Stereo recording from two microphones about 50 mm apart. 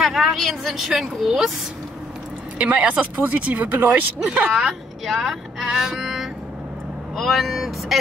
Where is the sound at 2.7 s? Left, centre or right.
Right.